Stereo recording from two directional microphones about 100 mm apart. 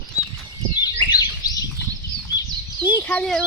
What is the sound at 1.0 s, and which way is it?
Bird, 20° left (ahead or behind).